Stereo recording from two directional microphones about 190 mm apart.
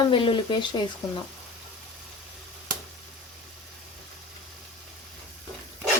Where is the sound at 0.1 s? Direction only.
25° left (ahead or behind).